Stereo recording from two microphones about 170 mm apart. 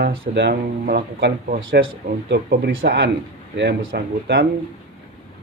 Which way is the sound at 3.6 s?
85° right.